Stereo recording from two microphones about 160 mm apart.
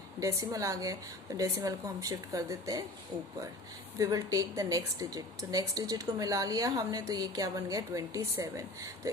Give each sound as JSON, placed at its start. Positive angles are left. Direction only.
{"t": 0.2, "sound": "a woman's voice", "side_deg": -20}
{"t": 3.9, "sound": "a woman's voice", "side_deg": -20}